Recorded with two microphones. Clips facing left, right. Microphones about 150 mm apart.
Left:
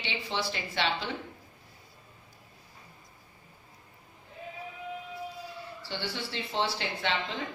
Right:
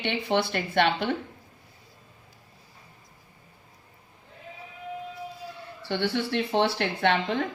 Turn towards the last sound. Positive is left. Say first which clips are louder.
# right 8 dB
turn(degrees=-60)  # may be behind; listen again after turning